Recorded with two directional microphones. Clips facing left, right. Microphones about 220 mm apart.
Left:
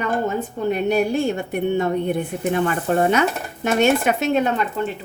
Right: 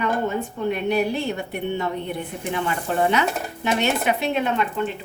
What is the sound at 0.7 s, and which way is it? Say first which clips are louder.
A woman's voice: left 4 dB; 45° left (ahead or behind).